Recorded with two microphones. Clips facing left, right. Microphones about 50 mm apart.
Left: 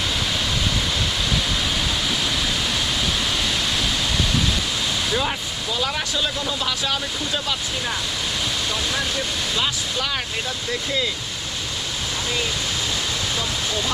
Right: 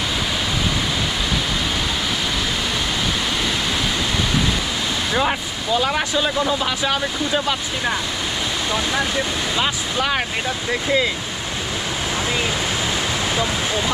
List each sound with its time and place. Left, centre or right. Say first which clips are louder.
5.7 s speech: right 6 dB; centre
13.3 s speech: right 4 dB; centre